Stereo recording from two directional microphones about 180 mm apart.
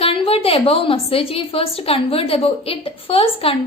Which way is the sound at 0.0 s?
30° left (ahead or behind).